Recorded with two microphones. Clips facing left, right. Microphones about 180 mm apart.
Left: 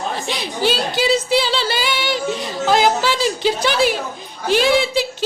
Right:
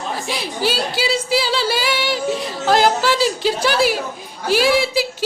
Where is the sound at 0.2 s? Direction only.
5° right (ahead or behind).